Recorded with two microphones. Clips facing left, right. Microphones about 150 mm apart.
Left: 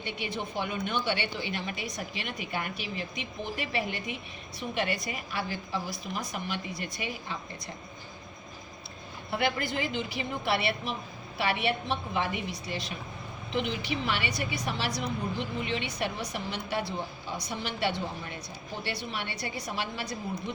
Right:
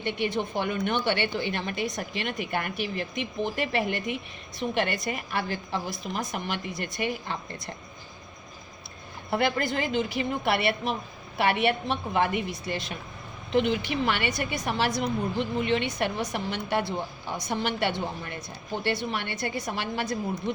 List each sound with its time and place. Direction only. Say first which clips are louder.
0.0 s a woman's voice: right 7 dB; 55° right (ahead or behind)
9.3 s a woman's voice: right 4 dB; 50° right (ahead or behind)